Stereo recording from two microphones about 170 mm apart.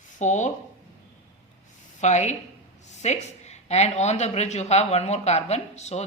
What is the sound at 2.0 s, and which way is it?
Speech, 45° left (ahead or behind).